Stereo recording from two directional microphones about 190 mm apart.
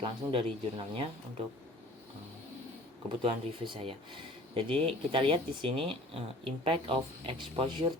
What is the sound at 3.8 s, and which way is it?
Speech, 30° right (ahead or behind).